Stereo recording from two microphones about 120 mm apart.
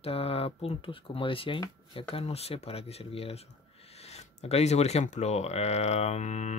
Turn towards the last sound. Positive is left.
turn(degrees=85)